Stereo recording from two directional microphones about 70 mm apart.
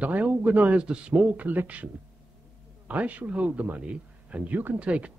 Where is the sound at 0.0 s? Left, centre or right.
Right.